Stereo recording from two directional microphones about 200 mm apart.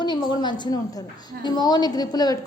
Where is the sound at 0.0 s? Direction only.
20° left (ahead or behind).